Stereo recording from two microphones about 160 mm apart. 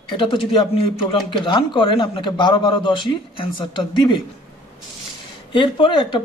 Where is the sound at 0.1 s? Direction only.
30° left (ahead or behind).